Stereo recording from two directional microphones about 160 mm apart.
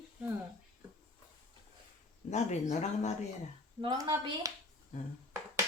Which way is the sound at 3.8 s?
30° right (ahead or behind).